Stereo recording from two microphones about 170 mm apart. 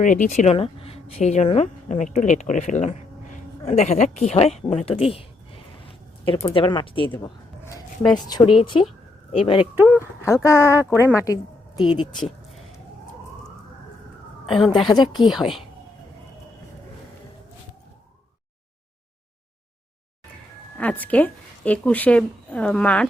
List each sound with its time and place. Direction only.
0.0 s speech: 50° left (ahead or behind); by 5.2 s 35° left (ahead or behind)
5.8 s a sound: 30° left (ahead or behind)
6.5 s speech: 30° left (ahead or behind)
7.2 s a sound: 15° left (ahead or behind)
8.3 s a woman's voice: 30° left (ahead or behind)
9.7 s speech: 10° right (ahead or behind)
10.2 s a woman's voice: 15° left (ahead or behind)
14.4 s a woman's voice: centre (ahead or behind)
14.8 s a woman's voice: 25° left (ahead or behind)
15.3 s speech: centre (ahead or behind)
20.7 s a woman's voice: 10° left (ahead or behind)